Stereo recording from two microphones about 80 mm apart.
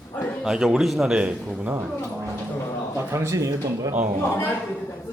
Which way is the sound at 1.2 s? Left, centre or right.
Centre.